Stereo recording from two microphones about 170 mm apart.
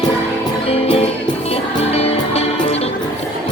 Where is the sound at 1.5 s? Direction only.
35° left (ahead or behind).